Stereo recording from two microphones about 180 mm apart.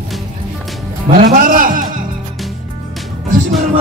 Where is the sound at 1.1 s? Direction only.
55° right (ahead or behind).